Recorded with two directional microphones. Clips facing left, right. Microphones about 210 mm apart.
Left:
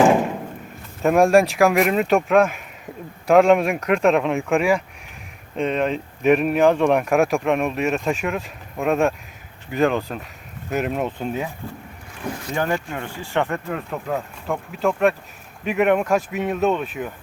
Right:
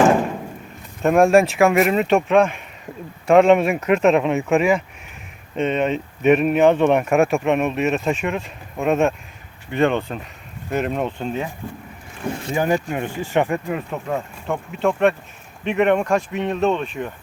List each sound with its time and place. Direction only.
0.0 s a sound: centre (ahead or behind)
1.0 s speech: centre (ahead or behind)
12.3 s speech: 25° right (ahead or behind)
13.9 s speech: centre (ahead or behind)